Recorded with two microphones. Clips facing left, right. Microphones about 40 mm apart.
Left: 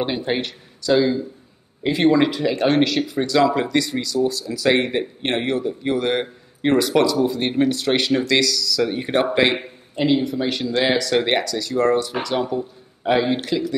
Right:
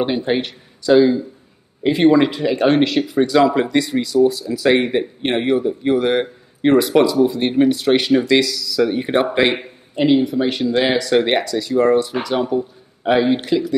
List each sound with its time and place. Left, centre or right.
0.3 s speech: centre
4.6 s speech: centre
8.8 s speech: centre